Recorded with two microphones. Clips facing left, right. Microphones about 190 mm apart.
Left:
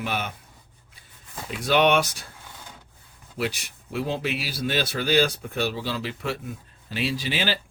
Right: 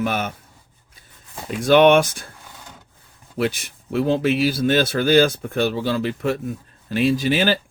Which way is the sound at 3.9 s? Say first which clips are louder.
Right 9 dB; 55° right (ahead or behind).